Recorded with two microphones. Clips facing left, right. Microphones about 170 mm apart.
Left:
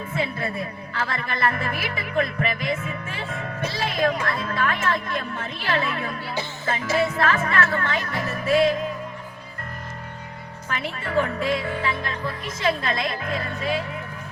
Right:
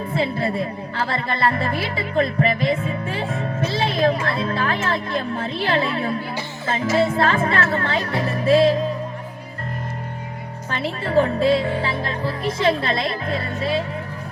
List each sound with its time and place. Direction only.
0.1 s speech: 30° right (ahead or behind)
10.7 s speech: 30° right (ahead or behind)